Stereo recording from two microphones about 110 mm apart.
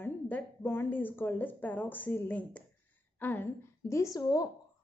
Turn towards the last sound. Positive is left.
turn(degrees=35)  # may be behind; listen again after turning